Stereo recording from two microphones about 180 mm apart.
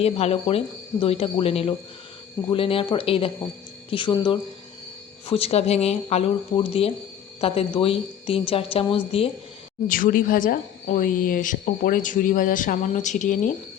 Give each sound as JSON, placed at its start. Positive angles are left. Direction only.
{"t": 0.0, "sound": "a woman's voice", "side_deg": 35}
{"t": 9.9, "sound": "a woman's voice", "side_deg": 50}